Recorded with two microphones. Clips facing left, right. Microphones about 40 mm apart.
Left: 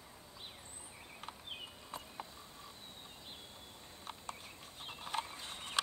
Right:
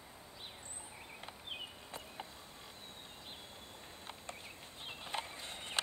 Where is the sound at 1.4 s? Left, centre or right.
Centre.